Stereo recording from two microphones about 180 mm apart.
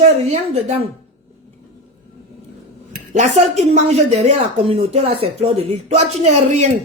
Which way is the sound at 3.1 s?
40° right (ahead or behind).